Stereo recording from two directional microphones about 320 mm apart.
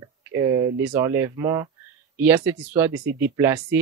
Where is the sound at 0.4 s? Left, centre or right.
Centre.